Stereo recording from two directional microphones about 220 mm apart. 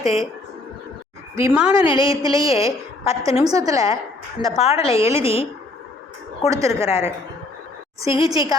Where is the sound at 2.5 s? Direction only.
15° right (ahead or behind).